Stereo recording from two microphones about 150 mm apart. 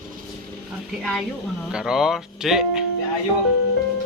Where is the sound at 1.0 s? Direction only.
5° left (ahead or behind).